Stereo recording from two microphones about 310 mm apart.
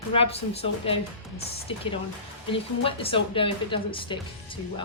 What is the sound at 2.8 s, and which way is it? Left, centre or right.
A woman's voice, centre.